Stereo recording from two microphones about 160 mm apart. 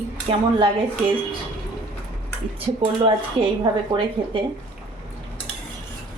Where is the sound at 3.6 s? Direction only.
30° right (ahead or behind).